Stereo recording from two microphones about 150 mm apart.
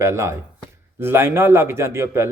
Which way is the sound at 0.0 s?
20° right (ahead or behind).